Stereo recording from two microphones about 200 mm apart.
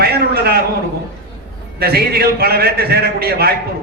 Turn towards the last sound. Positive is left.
turn(degrees=-50)  # may be behind; listen again after turning